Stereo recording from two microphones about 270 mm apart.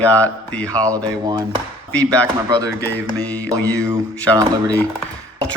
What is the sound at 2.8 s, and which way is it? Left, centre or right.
A man's voice, centre.